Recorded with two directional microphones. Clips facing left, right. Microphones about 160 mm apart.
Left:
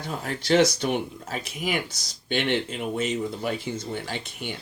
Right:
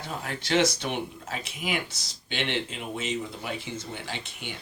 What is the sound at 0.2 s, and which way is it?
Speech, 40° left (ahead or behind).